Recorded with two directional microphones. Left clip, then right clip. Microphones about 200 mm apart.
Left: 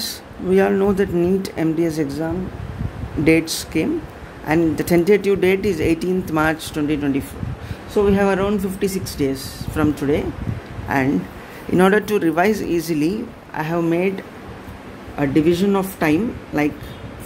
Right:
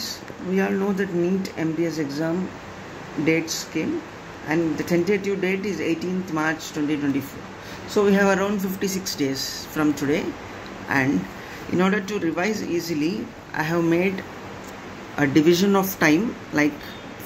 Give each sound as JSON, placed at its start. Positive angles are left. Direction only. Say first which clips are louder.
{"t": 0.6, "sound": "speech", "louder": "left 7 dB", "side_deg": 20}
{"t": 3.3, "sound": "speech", "louder": "left 6 dB", "side_deg": 25}
{"t": 7.9, "sound": "speech", "louder": "left 2 dB", "side_deg": 0}
{"t": 11.7, "sound": "speech", "louder": "left 8 dB", "side_deg": 30}
{"t": 13.6, "sound": "speech", "louder": "left 2 dB", "side_deg": 5}